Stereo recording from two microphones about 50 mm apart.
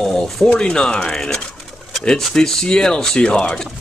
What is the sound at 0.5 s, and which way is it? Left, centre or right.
Speech, centre.